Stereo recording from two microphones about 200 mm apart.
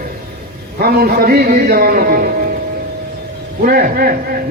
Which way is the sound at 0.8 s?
50° right (ahead or behind).